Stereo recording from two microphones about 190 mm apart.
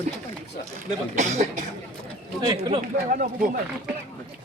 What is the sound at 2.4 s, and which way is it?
Speech, 25° right (ahead or behind).